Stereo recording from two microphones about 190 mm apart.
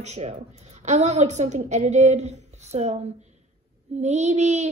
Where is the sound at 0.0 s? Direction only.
35° right (ahead or behind).